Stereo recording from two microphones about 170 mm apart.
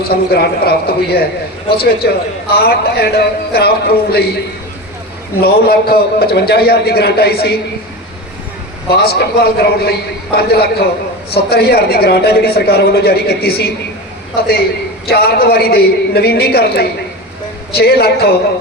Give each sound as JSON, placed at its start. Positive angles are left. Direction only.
{"t": 0.1, "sound": "a man's voice", "side_deg": 70}
{"t": 5.4, "sound": "a man's voice", "side_deg": 65}
{"t": 8.9, "sound": "a man's voice", "side_deg": 70}